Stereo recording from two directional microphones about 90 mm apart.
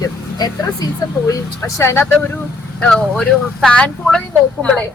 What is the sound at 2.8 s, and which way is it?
A woman's voice, 10° left (ahead or behind).